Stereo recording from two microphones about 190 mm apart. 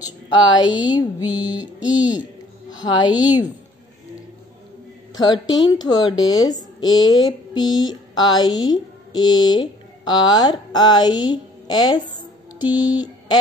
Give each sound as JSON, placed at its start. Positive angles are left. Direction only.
{"t": 0.7, "sound": "speech", "side_deg": -5}
{"t": 5.1, "sound": "speech", "side_deg": 20}
{"t": 12.5, "sound": "mantra", "side_deg": 20}